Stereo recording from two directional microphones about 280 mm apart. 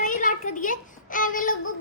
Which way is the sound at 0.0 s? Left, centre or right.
Left.